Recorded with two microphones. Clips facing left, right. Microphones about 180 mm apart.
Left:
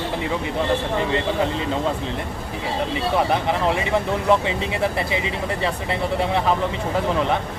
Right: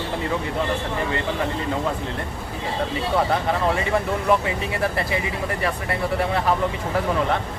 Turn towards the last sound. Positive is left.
turn(degrees=20)  # may be behind; listen again after turning